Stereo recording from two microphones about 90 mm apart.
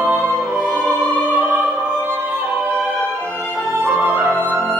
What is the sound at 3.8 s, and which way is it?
Music, 20° right (ahead or behind).